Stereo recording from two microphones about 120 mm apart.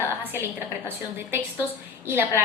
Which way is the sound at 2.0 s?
20° right (ahead or behind).